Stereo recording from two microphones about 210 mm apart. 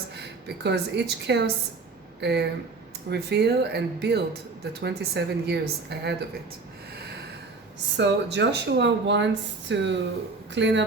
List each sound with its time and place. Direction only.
0.2 s a woman's voice: 55° right (ahead or behind)
7.9 s speech: 60° right (ahead or behind)